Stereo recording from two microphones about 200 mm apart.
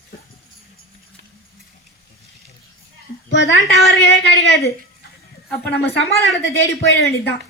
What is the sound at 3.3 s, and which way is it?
A woman's voice, 65° left (ahead or behind).